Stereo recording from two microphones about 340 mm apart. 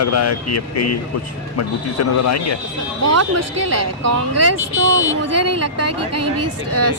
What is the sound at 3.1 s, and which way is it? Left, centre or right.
A woman's voice, right.